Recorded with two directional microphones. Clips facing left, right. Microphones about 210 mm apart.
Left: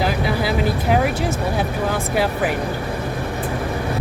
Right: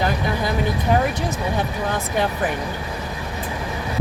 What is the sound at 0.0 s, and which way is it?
Speech, 5° left (ahead or behind).